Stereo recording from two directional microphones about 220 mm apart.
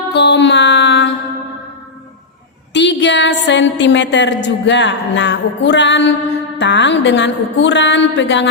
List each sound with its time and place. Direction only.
0.1 s music: 50° left (ahead or behind)
2.7 s a woman's voice: 55° left (ahead or behind)